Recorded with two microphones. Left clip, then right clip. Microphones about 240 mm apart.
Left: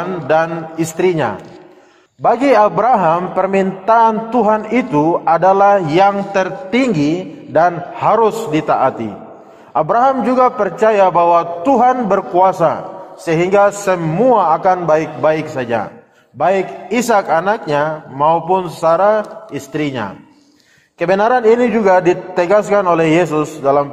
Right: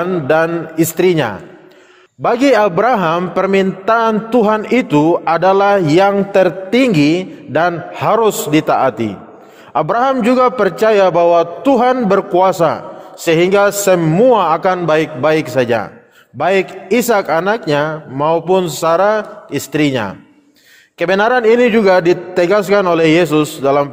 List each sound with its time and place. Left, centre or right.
0.0 s a man's voice: right